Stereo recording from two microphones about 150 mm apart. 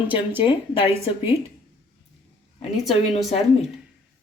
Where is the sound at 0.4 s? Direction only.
35° left (ahead or behind).